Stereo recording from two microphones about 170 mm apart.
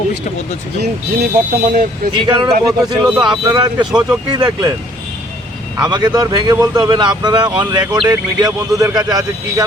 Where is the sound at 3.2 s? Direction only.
20° right (ahead or behind).